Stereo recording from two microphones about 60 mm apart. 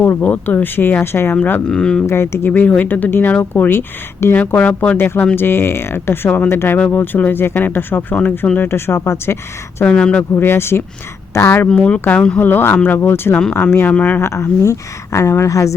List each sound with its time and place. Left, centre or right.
0.0 s speech: left
1.6 s speech: centre
2.0 s speech: left
2.5 s speech: left
4.4 s speech: left
4.9 s speech: left
9.8 s speech: centre
10.3 s speech: left
11.7 s speech: centre
12.4 s speech: left
14.2 s speech: left